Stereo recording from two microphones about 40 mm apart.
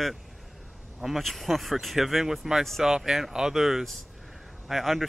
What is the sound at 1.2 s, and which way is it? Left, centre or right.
Speech, centre.